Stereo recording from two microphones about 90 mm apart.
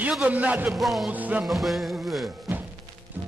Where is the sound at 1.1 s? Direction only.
20° right (ahead or behind).